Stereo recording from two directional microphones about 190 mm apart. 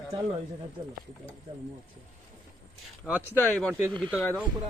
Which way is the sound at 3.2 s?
10° left (ahead or behind).